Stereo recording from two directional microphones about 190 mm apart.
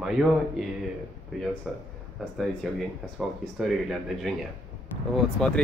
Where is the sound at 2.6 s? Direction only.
Centre (ahead or behind).